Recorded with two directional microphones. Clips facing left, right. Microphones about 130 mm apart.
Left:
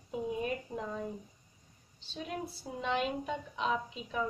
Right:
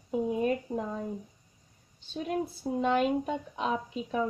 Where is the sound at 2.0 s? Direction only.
50° right (ahead or behind).